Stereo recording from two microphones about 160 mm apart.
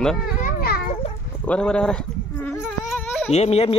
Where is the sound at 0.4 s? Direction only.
70° left (ahead or behind).